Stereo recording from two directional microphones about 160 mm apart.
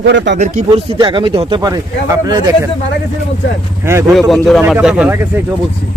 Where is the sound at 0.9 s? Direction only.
30° right (ahead or behind).